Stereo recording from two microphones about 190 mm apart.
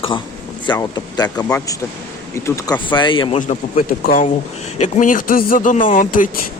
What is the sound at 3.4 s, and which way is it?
Speech, 45° left (ahead or behind).